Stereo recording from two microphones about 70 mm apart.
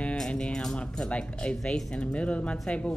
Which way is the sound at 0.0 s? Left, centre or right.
Centre.